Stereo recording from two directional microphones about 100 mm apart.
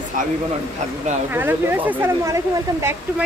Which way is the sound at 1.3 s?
20° right (ahead or behind).